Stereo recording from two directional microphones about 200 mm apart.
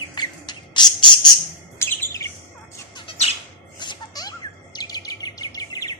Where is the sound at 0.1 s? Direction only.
20° left (ahead or behind).